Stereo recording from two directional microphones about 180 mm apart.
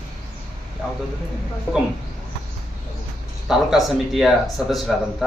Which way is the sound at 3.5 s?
Centre (ahead or behind).